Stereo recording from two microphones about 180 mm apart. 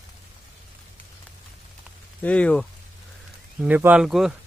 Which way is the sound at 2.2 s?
5° left (ahead or behind).